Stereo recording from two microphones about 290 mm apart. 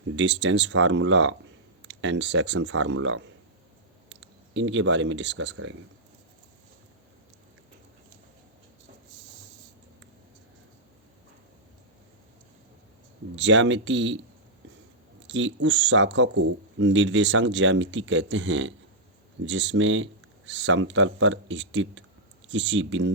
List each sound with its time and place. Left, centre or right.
0.2 s speech: right
13.3 s speech: right
15.3 s speech: right